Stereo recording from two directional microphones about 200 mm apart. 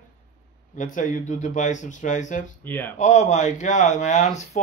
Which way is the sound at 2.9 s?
35° left (ahead or behind).